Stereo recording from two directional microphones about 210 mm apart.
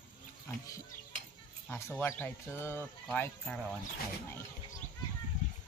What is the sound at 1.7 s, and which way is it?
Speech, 10° left (ahead or behind).